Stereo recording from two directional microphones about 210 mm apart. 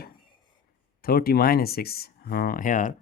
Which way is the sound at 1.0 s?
45° left (ahead or behind).